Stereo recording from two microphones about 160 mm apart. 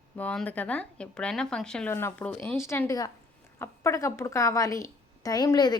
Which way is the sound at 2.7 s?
20° left (ahead or behind).